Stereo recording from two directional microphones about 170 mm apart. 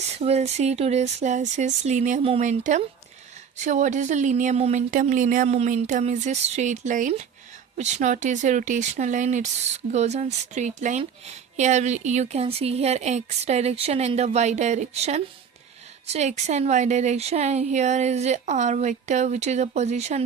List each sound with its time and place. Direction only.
0.2 s speech: 40° right (ahead or behind)